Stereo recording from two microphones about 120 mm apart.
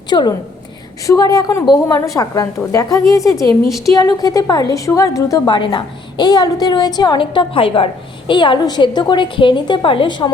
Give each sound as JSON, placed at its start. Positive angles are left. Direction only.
{"t": 0.1, "sound": "a woman's voice", "side_deg": 35}
{"t": 3.7, "sound": "a woman's voice", "side_deg": 0}
{"t": 3.9, "sound": "a woman's voice", "side_deg": 30}
{"t": 5.5, "sound": "a woman's voice", "side_deg": 40}